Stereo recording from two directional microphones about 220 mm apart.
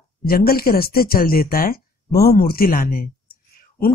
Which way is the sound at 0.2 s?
45° left (ahead or behind).